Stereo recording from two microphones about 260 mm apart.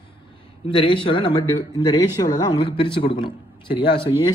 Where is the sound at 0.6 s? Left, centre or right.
Centre.